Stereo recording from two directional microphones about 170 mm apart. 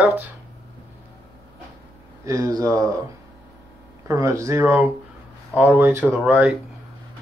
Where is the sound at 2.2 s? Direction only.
20° right (ahead or behind).